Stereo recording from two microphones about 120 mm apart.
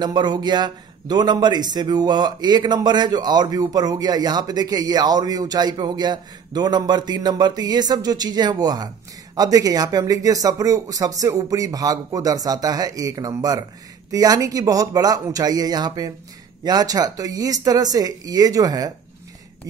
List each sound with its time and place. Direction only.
0.0 s a man's voice: 35° right (ahead or behind)